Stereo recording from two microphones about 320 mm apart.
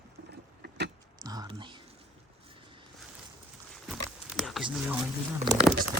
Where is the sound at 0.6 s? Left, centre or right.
Right.